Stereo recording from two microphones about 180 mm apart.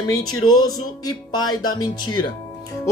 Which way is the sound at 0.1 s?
20° left (ahead or behind).